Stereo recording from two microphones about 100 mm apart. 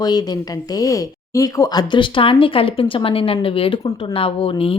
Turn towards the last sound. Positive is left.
turn(degrees=65)  # may be behind; listen again after turning